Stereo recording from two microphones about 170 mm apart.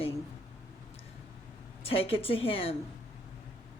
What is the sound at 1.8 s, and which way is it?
Speech, 35° left (ahead or behind).